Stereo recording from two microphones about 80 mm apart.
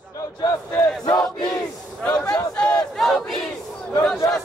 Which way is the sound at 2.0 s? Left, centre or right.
Centre.